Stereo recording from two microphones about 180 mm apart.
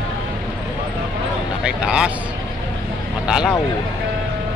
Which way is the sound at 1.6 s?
5° right (ahead or behind).